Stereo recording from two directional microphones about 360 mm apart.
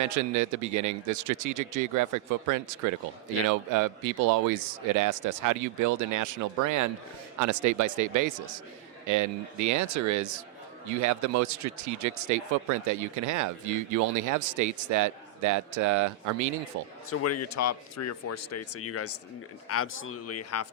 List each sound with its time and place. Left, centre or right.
0.0 s speech: right
17.1 s speech: left